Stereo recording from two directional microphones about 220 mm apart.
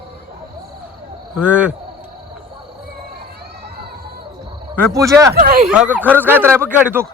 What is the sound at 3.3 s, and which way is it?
Crowd, 45° right (ahead or behind).